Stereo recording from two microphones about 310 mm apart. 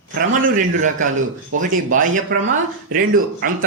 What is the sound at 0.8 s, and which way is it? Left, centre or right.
A woman's voice, right.